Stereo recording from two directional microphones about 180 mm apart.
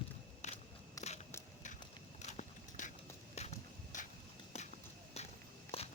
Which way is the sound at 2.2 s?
45° left (ahead or behind).